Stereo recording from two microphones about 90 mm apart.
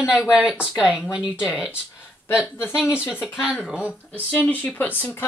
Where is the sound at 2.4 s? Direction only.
25° left (ahead or behind).